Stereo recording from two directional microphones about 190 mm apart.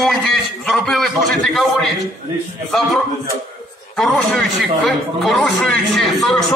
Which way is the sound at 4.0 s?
5° left (ahead or behind).